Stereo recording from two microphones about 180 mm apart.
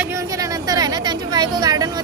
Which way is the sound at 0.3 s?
20° right (ahead or behind).